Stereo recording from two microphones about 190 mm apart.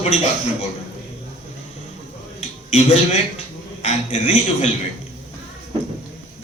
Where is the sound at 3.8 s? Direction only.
35° left (ahead or behind).